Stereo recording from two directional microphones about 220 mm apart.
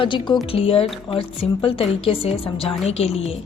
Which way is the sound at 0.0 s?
20° left (ahead or behind).